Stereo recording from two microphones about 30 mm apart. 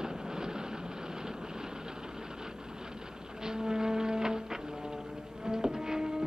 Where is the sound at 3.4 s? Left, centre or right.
Right.